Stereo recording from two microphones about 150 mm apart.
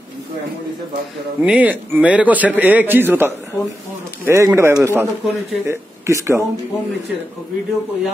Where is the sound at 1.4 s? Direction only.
10° right (ahead or behind).